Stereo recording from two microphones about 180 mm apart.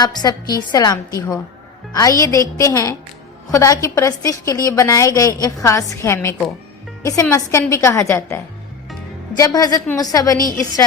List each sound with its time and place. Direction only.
0.0 s a woman's voice: 20° left (ahead or behind)
9.4 s a woman's voice: 20° left (ahead or behind)